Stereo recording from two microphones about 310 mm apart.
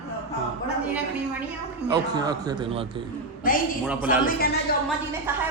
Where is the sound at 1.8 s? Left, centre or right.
Centre.